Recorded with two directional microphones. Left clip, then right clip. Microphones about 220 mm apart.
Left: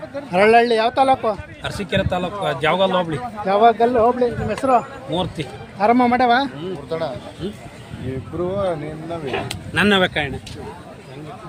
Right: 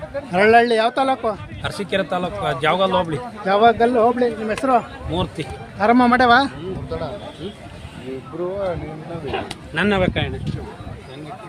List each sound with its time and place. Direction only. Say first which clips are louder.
0.3 s a man's voice: even; centre (ahead or behind)
6.0 s speech: right 5 dB; 15° right (ahead or behind)
6.9 s speech: left 4 dB; 30° left (ahead or behind)
9.2 s speech: right 1 dB; 45° left (ahead or behind)